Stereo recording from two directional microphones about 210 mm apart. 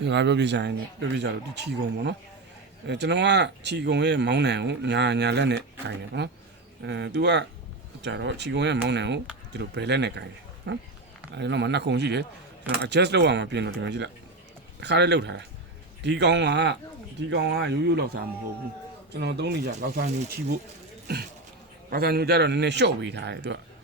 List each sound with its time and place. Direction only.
0.0 s a man's voice: 55° right (ahead or behind)
21.8 s a man's voice: 45° right (ahead or behind)